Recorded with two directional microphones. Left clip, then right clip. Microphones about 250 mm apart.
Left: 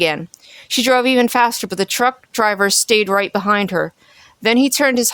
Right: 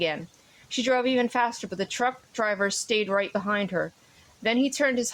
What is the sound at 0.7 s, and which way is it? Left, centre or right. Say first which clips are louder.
Speech: left 10 dB; left.